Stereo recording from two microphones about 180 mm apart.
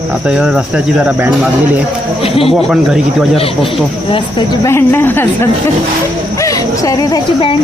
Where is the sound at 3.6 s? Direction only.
25° left (ahead or behind); by 5.3 s 10° left (ahead or behind).